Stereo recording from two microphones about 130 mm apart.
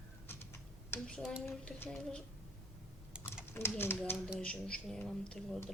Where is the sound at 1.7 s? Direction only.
15° left (ahead or behind).